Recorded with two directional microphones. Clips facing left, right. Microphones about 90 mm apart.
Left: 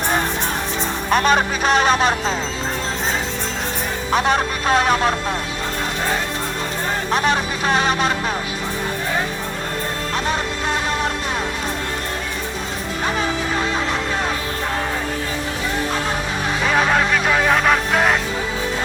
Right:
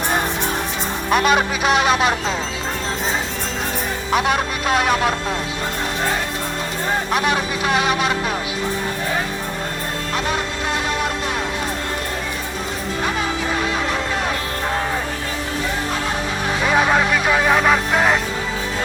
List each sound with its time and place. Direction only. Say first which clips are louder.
1.1 s speech: even; 40° left (ahead or behind)
4.1 s music: left 1 dB; 35° left (ahead or behind)
7.1 s speech: left 3 dB; 35° left (ahead or behind)
16.7 s music: right 1 dB; 5° right (ahead or behind)